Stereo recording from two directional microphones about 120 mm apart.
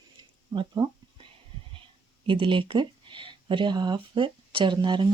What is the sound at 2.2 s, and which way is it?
Speech, 45° right (ahead or behind).